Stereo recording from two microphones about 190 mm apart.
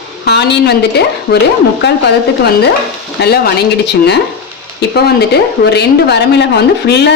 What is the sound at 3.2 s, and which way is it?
Speech, 55° left (ahead or behind).